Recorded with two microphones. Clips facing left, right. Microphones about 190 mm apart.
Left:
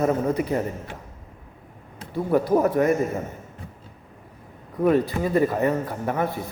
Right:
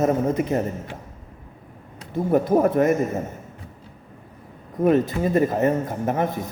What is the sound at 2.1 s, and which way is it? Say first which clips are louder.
Speech: right 1 dB; 20° right (ahead or behind).